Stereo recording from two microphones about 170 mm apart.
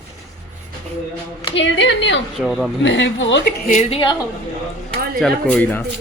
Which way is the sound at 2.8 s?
90° left.